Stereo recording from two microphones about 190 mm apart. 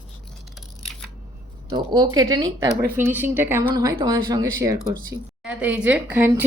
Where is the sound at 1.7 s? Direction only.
20° right (ahead or behind).